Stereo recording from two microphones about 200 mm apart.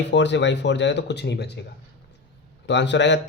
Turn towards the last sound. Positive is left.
turn(degrees=60)  # may be behind; listen again after turning